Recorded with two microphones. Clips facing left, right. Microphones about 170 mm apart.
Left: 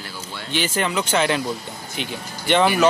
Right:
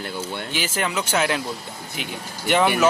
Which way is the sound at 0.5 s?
5° right (ahead or behind).